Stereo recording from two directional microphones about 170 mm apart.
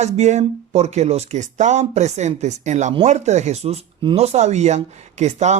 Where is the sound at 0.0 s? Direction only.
40° right (ahead or behind).